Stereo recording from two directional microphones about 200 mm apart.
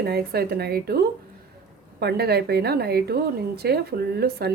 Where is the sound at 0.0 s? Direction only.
50° right (ahead or behind).